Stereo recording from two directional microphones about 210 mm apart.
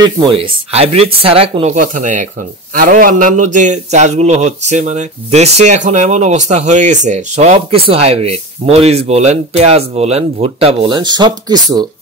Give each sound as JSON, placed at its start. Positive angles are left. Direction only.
{"t": 0.0, "sound": "a man's voice", "side_deg": -25}